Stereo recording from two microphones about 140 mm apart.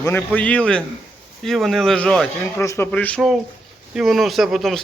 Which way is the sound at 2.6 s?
20° left (ahead or behind).